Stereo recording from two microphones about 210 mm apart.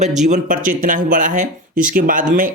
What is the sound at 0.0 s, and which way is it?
Speech, 35° right (ahead or behind).